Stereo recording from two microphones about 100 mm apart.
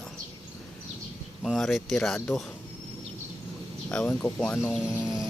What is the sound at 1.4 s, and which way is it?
Speech, centre (ahead or behind).